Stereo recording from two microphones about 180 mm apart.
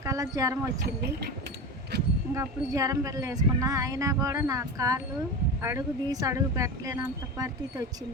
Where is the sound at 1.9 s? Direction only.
65° right (ahead or behind).